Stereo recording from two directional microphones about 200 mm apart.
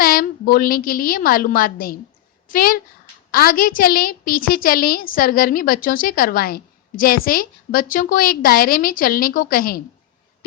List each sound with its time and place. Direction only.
0.0 s a woman's voice: 45° left (ahead or behind)